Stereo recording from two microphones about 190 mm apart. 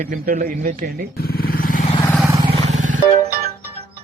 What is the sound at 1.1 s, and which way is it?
Vehicle, 55° left (ahead or behind).